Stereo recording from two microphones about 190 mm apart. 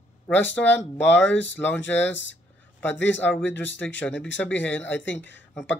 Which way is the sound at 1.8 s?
75° left (ahead or behind).